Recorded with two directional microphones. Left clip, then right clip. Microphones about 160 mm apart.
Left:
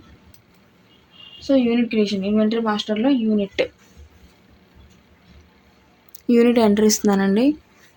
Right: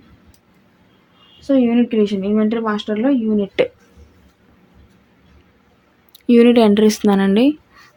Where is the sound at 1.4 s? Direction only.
75° right (ahead or behind).